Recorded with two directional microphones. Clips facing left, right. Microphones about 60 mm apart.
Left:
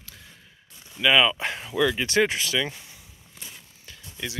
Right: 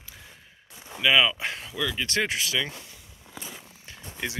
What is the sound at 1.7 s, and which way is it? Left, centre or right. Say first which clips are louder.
Speech: left 9 dB; left.